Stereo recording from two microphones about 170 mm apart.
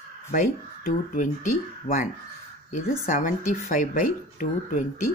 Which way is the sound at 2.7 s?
50° left (ahead or behind).